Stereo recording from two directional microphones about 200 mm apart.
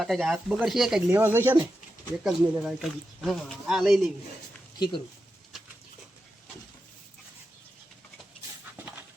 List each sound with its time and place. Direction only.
0.0 s speech: centre (ahead or behind)
4.8 s speech: 25° left (ahead or behind)